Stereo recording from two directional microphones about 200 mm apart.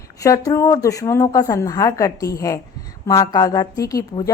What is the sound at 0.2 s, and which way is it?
A woman's voice, 15° left (ahead or behind).